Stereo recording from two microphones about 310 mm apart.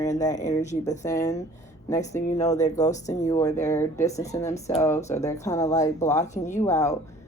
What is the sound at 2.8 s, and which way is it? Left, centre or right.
Speech, left.